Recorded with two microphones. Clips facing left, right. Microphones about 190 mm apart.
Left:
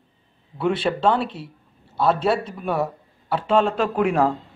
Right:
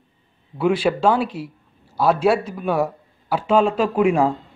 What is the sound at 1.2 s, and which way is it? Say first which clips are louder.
Speech: right 4 dB; 30° left (ahead or behind).